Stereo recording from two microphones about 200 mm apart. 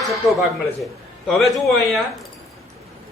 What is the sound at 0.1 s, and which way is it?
A man's voice, centre (ahead or behind).